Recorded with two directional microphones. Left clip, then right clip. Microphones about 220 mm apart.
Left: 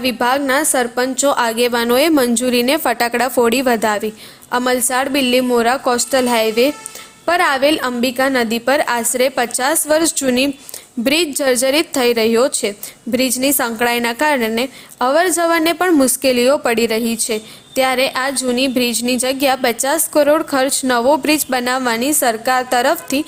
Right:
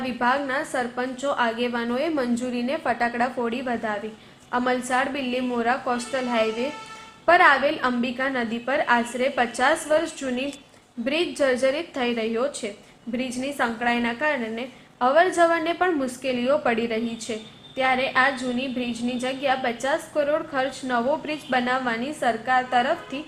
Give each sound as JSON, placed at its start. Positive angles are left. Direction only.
{"t": 0.0, "sound": "a woman's voice", "side_deg": 45}